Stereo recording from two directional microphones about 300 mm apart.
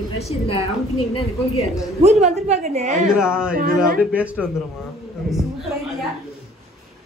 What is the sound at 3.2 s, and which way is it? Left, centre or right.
Speech, centre.